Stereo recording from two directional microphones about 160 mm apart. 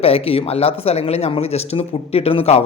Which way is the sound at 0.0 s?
40° left (ahead or behind).